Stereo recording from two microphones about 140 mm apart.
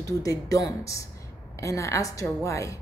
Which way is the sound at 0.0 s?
25° left (ahead or behind).